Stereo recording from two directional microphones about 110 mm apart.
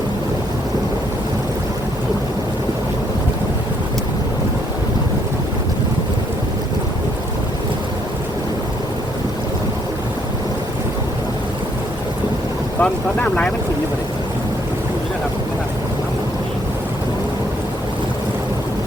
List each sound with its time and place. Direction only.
12.8 s speech: 10° left (ahead or behind)